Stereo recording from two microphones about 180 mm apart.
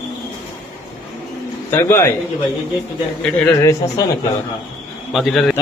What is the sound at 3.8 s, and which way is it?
Speech, 20° left (ahead or behind).